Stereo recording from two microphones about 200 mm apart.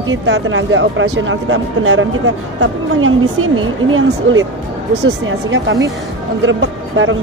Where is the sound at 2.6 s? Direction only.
85° right.